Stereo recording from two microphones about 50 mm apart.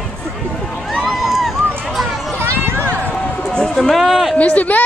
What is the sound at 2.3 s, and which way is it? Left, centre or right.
Run, right.